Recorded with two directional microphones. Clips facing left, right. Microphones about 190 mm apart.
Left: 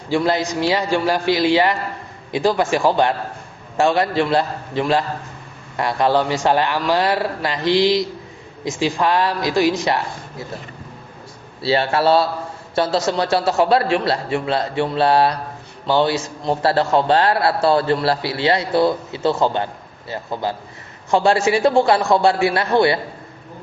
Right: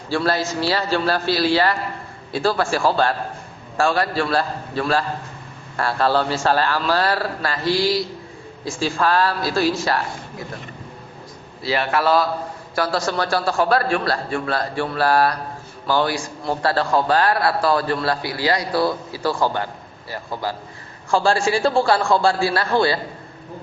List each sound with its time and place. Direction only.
0.1 s a man's voice: 15° left (ahead or behind)
11.6 s a man's voice: 30° left (ahead or behind)